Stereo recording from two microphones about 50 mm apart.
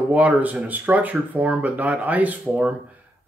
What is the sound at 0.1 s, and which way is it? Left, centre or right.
Speech, right.